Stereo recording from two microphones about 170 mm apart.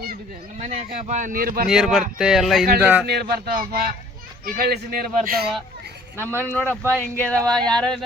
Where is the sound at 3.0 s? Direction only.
70° right (ahead or behind).